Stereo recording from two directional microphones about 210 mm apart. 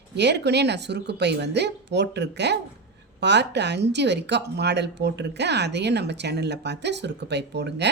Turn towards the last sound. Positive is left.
turn(degrees=-55)  # may be behind; listen again after turning